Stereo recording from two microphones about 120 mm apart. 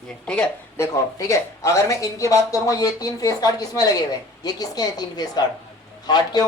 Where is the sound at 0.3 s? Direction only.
10° left (ahead or behind).